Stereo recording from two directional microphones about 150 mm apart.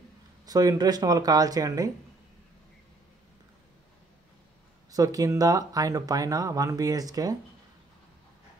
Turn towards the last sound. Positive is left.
turn(degrees=-25)  # may be behind; listen again after turning